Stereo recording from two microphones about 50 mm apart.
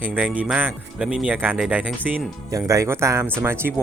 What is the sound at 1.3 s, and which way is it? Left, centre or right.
Speech, right.